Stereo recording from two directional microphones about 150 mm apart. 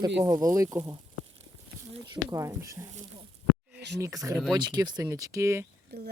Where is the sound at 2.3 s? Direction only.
20° right (ahead or behind).